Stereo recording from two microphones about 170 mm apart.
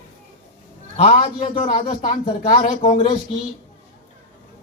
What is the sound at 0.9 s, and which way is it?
A man's voice, 35° left (ahead or behind).